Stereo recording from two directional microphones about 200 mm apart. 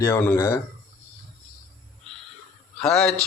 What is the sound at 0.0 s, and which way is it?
Speech, 10° left (ahead or behind).